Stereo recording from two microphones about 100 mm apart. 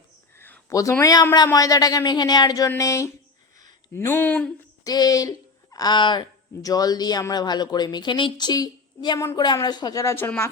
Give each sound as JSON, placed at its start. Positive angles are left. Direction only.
{"t": 0.3, "sound": "a sound", "side_deg": 20}
{"t": 0.7, "sound": "speech", "side_deg": 35}
{"t": 2.6, "sound": "speech", "side_deg": 30}
{"t": 4.8, "sound": "a woman's voice", "side_deg": 40}
{"t": 6.6, "sound": "a woman's voice", "side_deg": 40}
{"t": 10.2, "sound": "speech", "side_deg": 20}